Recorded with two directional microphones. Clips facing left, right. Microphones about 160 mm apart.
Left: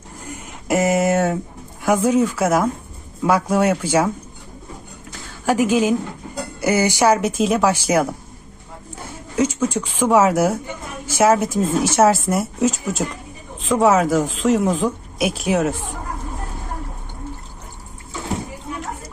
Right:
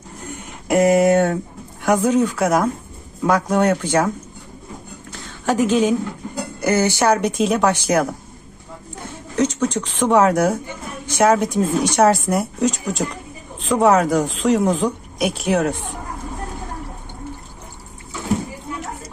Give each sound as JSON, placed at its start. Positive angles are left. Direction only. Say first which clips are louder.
{"t": 0.3, "sound": "a sound", "louder": "even", "side_deg": 5}
{"t": 1.8, "sound": "speech", "louder": "even", "side_deg": 5}
{"t": 5.5, "sound": "speech", "louder": "even", "side_deg": 10}
{"t": 9.3, "sound": "speech", "louder": "even", "side_deg": 10}